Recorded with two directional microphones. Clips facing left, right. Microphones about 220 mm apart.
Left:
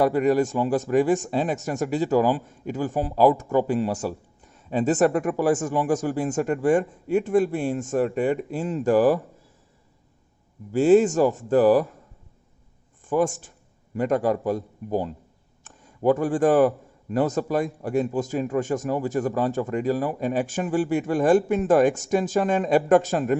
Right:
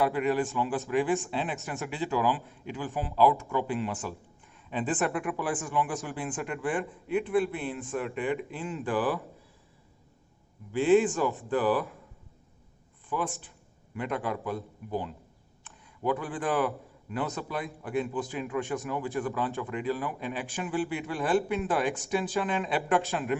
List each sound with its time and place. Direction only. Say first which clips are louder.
0.0 s a man's voice: left 7 dB; 40° left (ahead or behind)
10.7 s speech: left 6 dB; 40° left (ahead or behind)
13.1 s speech: left 10 dB; 45° left (ahead or behind)